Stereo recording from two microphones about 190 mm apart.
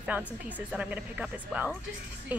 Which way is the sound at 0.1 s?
10° right (ahead or behind).